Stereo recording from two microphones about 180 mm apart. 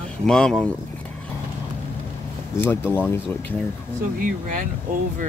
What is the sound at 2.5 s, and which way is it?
Speech, 10° left (ahead or behind).